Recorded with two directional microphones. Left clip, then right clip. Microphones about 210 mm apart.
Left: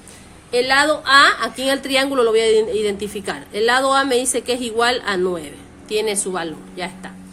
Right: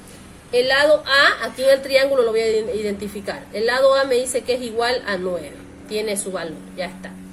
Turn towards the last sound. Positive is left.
turn(degrees=50)  # may be behind; listen again after turning